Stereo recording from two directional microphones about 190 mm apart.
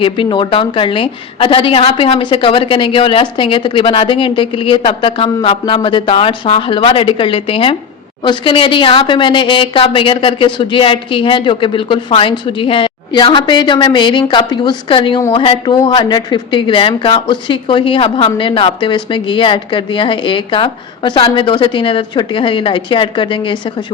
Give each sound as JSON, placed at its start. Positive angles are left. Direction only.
{"t": 0.0, "sound": "a woman's voice", "side_deg": 25}